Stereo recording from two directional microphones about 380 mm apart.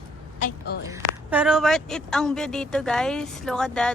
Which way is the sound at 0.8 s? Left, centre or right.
Centre.